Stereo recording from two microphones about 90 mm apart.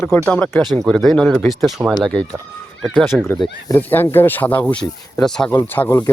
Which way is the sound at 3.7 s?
20° left (ahead or behind).